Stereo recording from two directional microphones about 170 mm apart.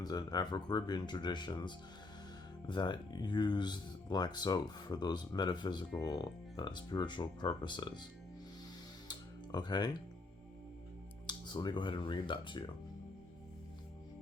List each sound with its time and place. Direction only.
0.0 s speech: 20° left (ahead or behind)
9.0 s music: 25° left (ahead or behind)
11.3 s speech: 25° left (ahead or behind)